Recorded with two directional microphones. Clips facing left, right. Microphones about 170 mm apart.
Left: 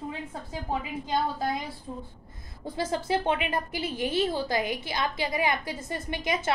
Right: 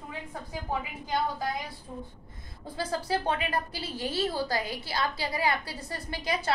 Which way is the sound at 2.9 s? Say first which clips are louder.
Left 2 dB; 20° left (ahead or behind).